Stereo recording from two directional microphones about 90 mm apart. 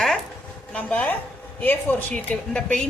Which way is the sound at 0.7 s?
15° left (ahead or behind).